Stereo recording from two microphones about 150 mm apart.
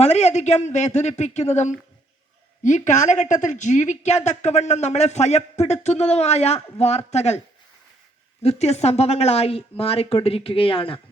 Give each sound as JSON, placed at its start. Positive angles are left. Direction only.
{"t": 0.0, "sound": "a woman's voice", "side_deg": 45}
{"t": 8.4, "sound": "a woman's voice", "side_deg": 45}